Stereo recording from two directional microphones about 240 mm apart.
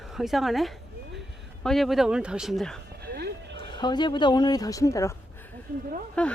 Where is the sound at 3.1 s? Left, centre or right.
Right.